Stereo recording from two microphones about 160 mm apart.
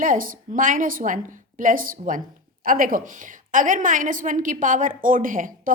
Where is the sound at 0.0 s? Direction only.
60° right (ahead or behind).